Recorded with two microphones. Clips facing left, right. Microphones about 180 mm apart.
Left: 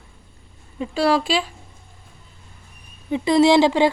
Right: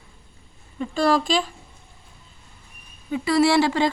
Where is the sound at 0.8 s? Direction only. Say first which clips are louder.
Left 1 dB; 10° left (ahead or behind).